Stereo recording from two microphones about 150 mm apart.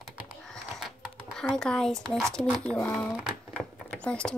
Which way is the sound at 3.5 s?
5° left (ahead or behind).